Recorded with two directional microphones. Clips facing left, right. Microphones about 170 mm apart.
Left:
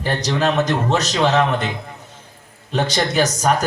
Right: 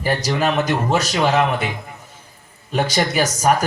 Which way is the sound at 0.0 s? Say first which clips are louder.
Even; 10° right (ahead or behind).